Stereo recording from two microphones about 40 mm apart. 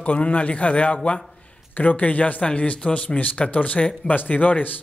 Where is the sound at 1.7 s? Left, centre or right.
Left.